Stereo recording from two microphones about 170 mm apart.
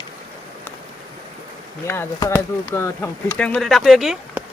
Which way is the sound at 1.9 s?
15° left (ahead or behind).